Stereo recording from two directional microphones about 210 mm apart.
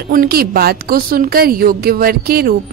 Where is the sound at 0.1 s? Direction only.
45° right (ahead or behind).